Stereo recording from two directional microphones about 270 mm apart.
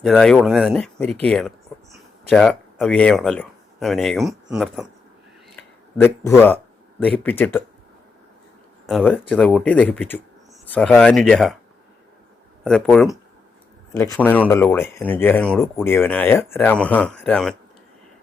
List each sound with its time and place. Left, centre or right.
0.0 s speech: centre
8.9 s speech: centre
12.6 s speech: centre